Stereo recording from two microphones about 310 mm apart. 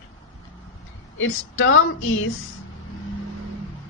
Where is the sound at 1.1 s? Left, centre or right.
Left.